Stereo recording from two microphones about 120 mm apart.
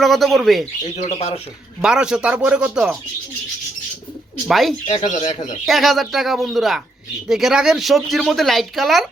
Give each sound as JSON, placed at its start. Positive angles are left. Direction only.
{"t": 0.0, "sound": "speech", "side_deg": 0}
{"t": 1.0, "sound": "speech", "side_deg": 60}
{"t": 1.8, "sound": "speech", "side_deg": -5}
{"t": 4.4, "sound": "speech", "side_deg": 0}
{"t": 4.9, "sound": "speech", "side_deg": 85}
{"t": 5.6, "sound": "speech", "side_deg": 0}